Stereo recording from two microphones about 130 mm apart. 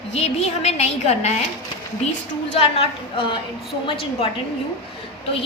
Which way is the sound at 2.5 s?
50° left (ahead or behind).